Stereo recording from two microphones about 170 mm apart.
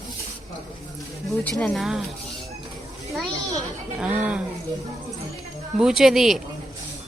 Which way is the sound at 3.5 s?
5° right (ahead or behind).